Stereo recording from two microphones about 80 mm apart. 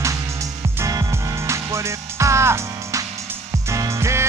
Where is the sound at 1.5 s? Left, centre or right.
Right.